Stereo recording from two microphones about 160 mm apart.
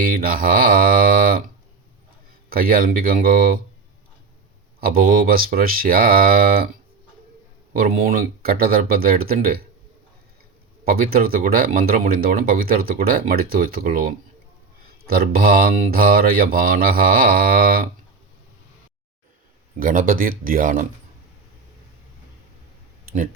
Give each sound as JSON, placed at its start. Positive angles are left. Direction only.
{"t": 0.0, "sound": "speech", "side_deg": -65}
{"t": 2.5, "sound": "speech", "side_deg": -65}
{"t": 4.8, "sound": "speech", "side_deg": -65}
{"t": 7.8, "sound": "speech", "side_deg": -65}
{"t": 10.8, "sound": "speech", "side_deg": -65}
{"t": 14.8, "sound": "speech", "side_deg": -70}
{"t": 19.8, "sound": "speech", "side_deg": -60}